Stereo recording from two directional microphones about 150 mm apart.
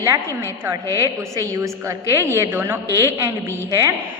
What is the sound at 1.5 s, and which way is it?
A woman's voice, 20° right (ahead or behind).